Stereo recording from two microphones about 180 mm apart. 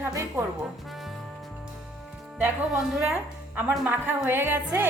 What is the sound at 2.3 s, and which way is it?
A woman's voice, 5° right (ahead or behind).